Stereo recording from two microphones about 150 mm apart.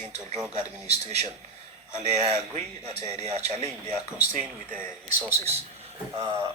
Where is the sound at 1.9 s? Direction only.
50° right (ahead or behind).